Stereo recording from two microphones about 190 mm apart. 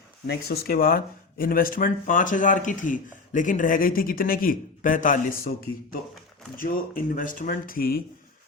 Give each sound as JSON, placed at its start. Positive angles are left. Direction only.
{"t": 0.3, "sound": "speech", "side_deg": 55}